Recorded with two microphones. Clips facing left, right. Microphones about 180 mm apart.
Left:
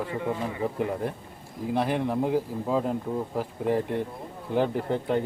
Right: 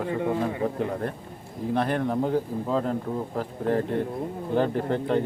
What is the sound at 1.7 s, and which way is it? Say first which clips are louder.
Speech: right 1 dB; 5° left (ahead or behind).